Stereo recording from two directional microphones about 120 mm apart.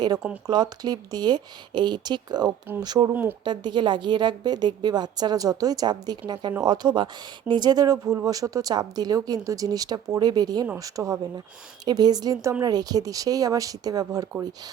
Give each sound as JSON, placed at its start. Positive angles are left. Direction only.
{"t": 0.4, "sound": "speech", "side_deg": -35}
{"t": 3.1, "sound": "speech", "side_deg": -15}
{"t": 3.4, "sound": "speech", "side_deg": -40}